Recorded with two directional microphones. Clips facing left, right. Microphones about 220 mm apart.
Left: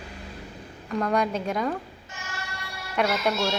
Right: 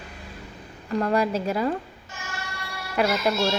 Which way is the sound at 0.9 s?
5° right (ahead or behind).